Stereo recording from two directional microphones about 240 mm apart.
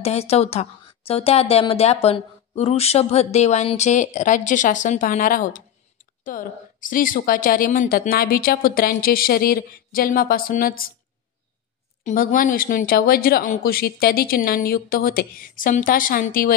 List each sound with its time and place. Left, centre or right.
0.0 s a woman's voice: left
12.0 s a woman's voice: left